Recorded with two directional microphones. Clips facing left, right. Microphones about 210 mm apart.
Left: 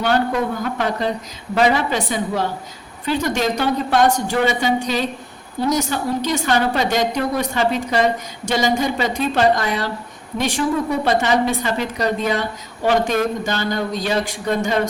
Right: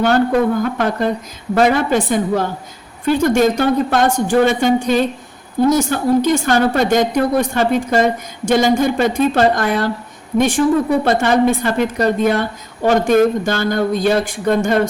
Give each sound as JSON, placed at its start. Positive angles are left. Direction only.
{"t": 0.0, "sound": "a woman's voice", "side_deg": -45}